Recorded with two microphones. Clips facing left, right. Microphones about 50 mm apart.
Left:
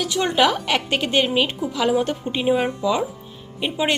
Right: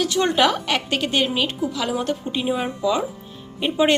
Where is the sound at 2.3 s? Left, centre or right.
Centre.